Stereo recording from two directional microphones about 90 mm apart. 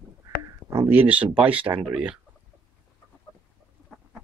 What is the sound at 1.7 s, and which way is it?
Speech, 35° right (ahead or behind).